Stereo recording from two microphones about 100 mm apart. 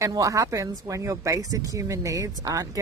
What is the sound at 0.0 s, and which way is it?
Speech, 35° right (ahead or behind).